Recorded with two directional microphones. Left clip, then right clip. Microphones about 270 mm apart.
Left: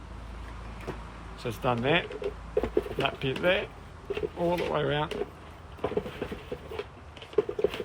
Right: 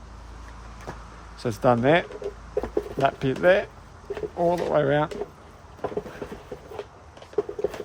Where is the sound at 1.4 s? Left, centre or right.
Right.